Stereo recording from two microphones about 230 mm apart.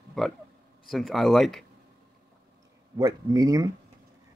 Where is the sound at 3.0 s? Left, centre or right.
Centre.